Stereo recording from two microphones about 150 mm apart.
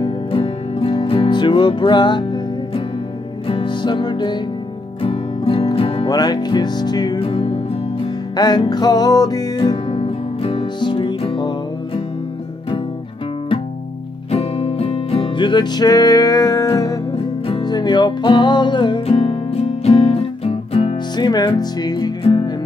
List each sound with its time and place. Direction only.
0.0 s music: 35° left (ahead or behind)
6.0 s music: 25° left (ahead or behind)
7.2 s music: 40° left (ahead or behind)
8.4 s music: 25° left (ahead or behind)
14.3 s music: 45° left (ahead or behind)
21.3 s music: 25° left (ahead or behind)